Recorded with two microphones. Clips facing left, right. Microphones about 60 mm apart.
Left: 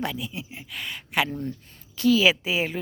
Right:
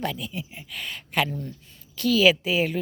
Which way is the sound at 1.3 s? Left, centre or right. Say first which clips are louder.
Left 3 dB; left.